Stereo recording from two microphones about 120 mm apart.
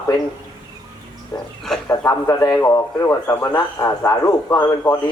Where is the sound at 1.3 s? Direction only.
15° left (ahead or behind).